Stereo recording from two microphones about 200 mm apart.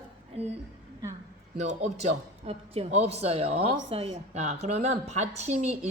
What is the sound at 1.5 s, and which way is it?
A woman's voice, 35° right (ahead or behind).